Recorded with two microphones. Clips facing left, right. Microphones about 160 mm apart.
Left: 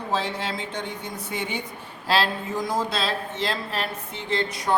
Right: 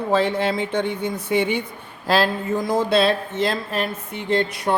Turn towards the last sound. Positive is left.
turn(degrees=-60)  # may be behind; listen again after turning